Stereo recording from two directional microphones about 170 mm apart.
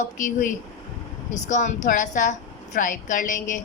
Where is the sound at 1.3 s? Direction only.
45° left (ahead or behind).